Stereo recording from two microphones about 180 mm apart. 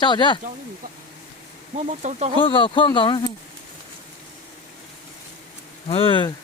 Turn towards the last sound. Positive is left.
turn(degrees=30)  # may be behind; listen again after turning